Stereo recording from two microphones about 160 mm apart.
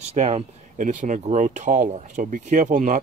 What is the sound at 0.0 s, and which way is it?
Speech, 40° right (ahead or behind).